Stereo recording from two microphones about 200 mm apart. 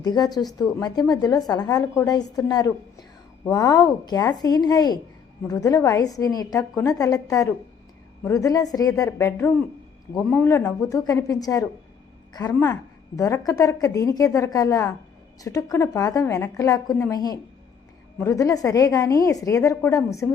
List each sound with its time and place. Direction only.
0.0 s a woman's voice: 20° left (ahead or behind)